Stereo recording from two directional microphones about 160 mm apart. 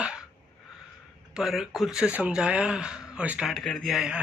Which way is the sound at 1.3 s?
5° right (ahead or behind).